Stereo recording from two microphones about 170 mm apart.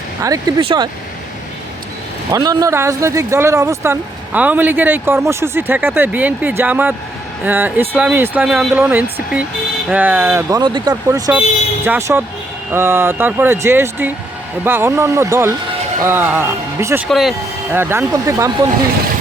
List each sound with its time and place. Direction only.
0.2 s speech: 20° right (ahead or behind)
0.6 s speech: 30° right (ahead or behind)
2.3 s speech: 20° right (ahead or behind)
10.6 s speech: 25° right (ahead or behind)
17.1 s speech: centre (ahead or behind)
17.7 s speech: 15° right (ahead or behind)